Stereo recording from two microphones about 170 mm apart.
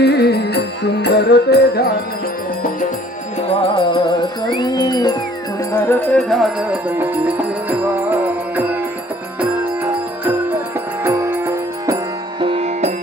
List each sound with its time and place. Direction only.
0.0 s music: 75° left (ahead or behind)
3.4 s music: 35° left (ahead or behind); by 11.9 s 15° right (ahead or behind)
12.4 s music: 35° right (ahead or behind)